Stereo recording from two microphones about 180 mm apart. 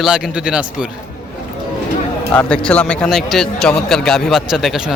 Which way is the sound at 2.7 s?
5° left (ahead or behind).